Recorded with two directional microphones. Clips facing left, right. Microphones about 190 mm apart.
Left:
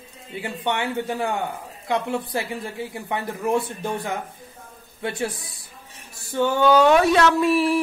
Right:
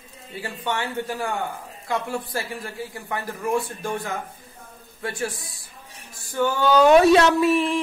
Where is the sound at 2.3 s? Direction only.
20° left (ahead or behind).